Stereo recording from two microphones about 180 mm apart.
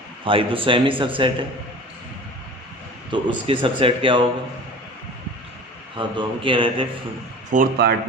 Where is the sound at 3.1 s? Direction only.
25° right (ahead or behind).